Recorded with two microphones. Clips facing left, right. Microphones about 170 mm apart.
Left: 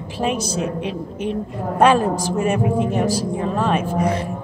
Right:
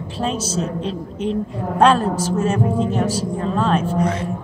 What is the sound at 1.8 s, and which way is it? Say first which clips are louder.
Speech: even; 10° left (ahead or behind).